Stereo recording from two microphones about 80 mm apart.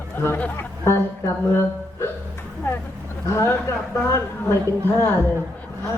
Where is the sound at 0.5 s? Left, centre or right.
Left.